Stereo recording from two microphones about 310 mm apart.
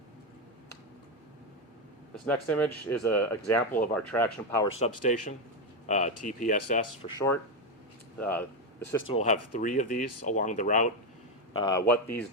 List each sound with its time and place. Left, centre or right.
2.1 s speech: centre
4.8 s speech: left
8.2 s speech: centre
9.1 s speech: left
11.5 s speech: centre